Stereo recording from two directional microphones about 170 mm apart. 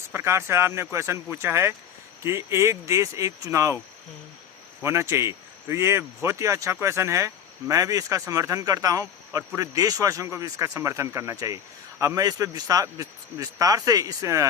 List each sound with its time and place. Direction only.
0.1 s speech: 15° right (ahead or behind)
4.8 s speech: 15° right (ahead or behind)